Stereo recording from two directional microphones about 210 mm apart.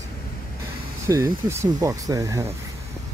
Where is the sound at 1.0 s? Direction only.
15° right (ahead or behind).